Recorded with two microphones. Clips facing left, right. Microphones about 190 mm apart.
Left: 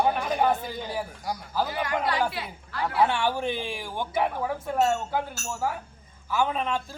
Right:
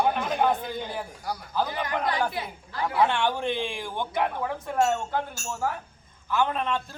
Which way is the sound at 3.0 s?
10° left (ahead or behind).